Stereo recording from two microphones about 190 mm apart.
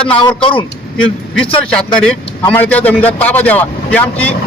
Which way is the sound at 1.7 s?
5° left (ahead or behind).